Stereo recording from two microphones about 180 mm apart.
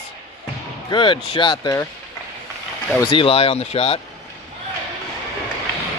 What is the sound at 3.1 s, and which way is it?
Speech, 30° left (ahead or behind).